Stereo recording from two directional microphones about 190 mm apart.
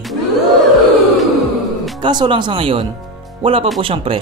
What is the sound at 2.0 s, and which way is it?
Speech, 25° right (ahead or behind).